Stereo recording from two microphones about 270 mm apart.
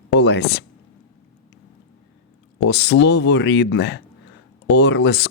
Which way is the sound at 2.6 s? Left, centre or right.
Left.